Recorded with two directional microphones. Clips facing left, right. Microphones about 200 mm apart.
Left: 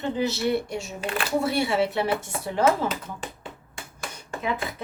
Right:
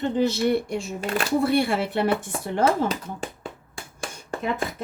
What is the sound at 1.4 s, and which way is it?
Speech, 55° right (ahead or behind).